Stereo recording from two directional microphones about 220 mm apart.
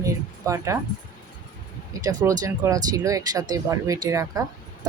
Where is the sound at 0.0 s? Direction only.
15° right (ahead or behind).